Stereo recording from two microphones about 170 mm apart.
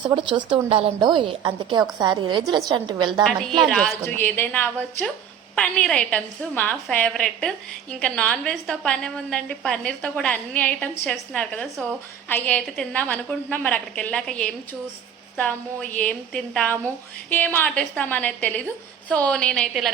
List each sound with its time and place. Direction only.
0.0 s a woman's voice: 25° right (ahead or behind)
3.2 s a woman's voice: centre (ahead or behind)